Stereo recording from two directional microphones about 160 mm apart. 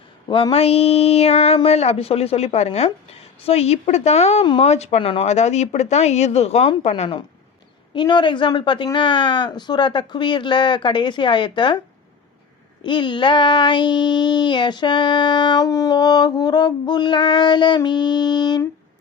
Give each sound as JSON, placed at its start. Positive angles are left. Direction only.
{"t": 0.3, "sound": "speech", "side_deg": 30}
{"t": 7.9, "sound": "child singing", "side_deg": 30}
{"t": 12.8, "sound": "child singing", "side_deg": 30}